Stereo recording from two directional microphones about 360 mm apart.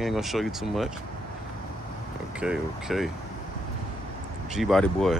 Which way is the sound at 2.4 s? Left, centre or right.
Centre.